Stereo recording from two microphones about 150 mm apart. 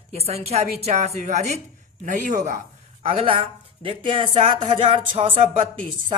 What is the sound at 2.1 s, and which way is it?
Speech, 60° right (ahead or behind).